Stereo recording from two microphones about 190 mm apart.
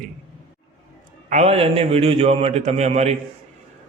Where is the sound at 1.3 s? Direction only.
35° right (ahead or behind).